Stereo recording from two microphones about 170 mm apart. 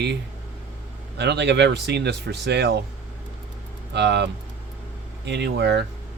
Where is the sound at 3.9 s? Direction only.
90° right.